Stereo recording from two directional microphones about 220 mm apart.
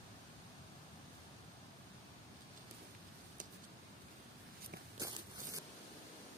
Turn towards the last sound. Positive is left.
turn(degrees=-15)  # may be behind; listen again after turning